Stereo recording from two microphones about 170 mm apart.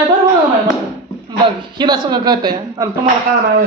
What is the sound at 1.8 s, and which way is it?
A woman's voice, 25° right (ahead or behind).